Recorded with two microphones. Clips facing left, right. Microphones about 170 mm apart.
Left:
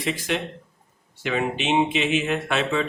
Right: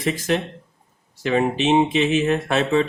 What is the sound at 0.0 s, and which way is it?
Speech, 40° right (ahead or behind).